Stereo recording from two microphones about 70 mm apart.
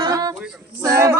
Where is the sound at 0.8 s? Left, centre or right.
Right.